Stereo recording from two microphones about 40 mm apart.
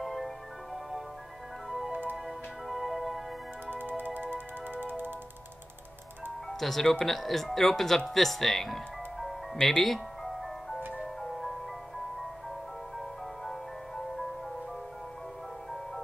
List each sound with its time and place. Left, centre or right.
0.0 s music: centre
1.9 s music: right
2.2 s music: centre
3.7 s music: right
6.6 s speech: centre
9.7 s music: centre
11.2 s marimba: centre